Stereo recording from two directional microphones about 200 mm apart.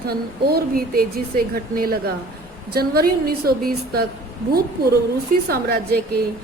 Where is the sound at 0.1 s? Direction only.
50° right (ahead or behind).